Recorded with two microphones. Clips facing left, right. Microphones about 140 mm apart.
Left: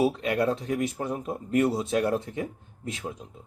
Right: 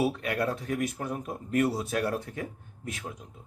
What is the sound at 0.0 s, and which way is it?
Speech, 25° left (ahead or behind).